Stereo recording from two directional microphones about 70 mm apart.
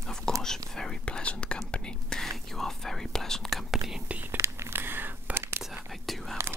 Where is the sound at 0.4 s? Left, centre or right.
Centre.